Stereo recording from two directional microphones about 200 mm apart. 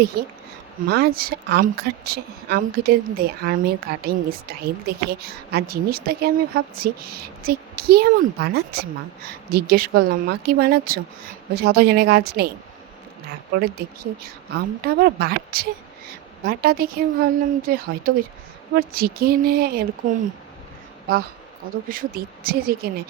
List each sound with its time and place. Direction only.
0.0 s a woman's voice: 50° right (ahead or behind)
13.6 s a woman's voice: 50° right (ahead or behind)
21.8 s a woman's voice: 45° right (ahead or behind)